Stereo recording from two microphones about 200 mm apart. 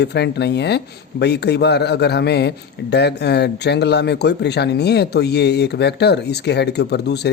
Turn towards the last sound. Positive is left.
turn(degrees=55)  # may be behind; listen again after turning